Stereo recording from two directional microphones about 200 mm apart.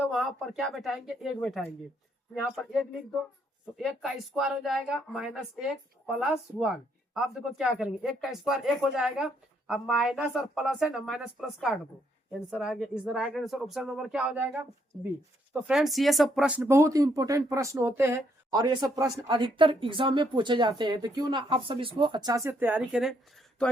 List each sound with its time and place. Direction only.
0.1 s speech: centre (ahead or behind)
15.6 s speech: centre (ahead or behind)